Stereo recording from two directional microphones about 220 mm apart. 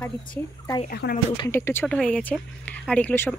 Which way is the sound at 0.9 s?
45° left (ahead or behind).